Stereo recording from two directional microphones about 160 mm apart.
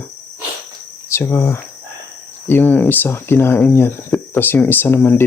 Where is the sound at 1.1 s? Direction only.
15° left (ahead or behind).